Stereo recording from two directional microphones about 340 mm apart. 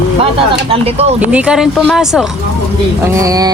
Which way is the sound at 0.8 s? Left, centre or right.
Centre.